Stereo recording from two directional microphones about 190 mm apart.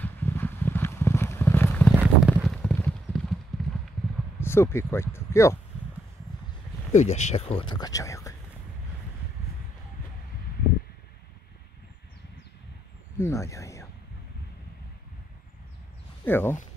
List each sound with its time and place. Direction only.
0.0 s horse: 10° left (ahead or behind)
2.0 s a sound: 10° right (ahead or behind)
2.5 s clip-clop: 5° left (ahead or behind)
4.4 s speech: 15° left (ahead or behind)
6.9 s speech: 35° left (ahead or behind); by 8.4 s 15° left (ahead or behind)
13.2 s speech: 15° left (ahead or behind)
16.3 s speech: 10° left (ahead or behind)